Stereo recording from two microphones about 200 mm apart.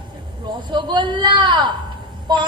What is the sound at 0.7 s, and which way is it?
Speech, 20° right (ahead or behind).